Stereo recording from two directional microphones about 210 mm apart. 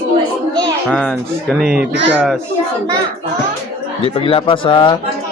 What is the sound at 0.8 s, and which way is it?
Speech, 5° left (ahead or behind).